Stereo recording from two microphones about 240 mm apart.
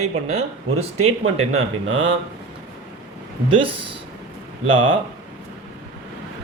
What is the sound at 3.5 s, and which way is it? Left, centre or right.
Speech, right.